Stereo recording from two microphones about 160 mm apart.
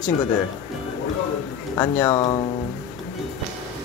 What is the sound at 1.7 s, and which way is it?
Speech, 20° left (ahead or behind).